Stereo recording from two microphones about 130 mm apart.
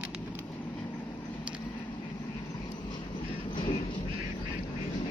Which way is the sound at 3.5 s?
45° left (ahead or behind).